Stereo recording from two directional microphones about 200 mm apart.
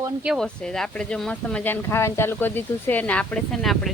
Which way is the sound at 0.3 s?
5° left (ahead or behind).